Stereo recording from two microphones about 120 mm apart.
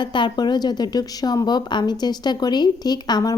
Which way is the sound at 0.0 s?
40° left (ahead or behind).